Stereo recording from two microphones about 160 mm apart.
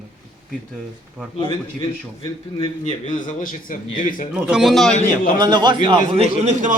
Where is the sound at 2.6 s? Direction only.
50° left (ahead or behind).